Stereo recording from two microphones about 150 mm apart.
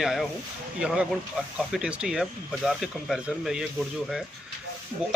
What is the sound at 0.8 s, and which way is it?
Speech, 5° right (ahead or behind).